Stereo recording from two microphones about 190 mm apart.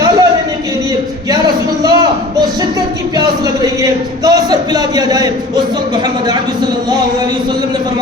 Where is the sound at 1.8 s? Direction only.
20° right (ahead or behind).